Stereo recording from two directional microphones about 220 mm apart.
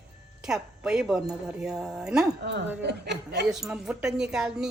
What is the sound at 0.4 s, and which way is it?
Speech, 5° right (ahead or behind).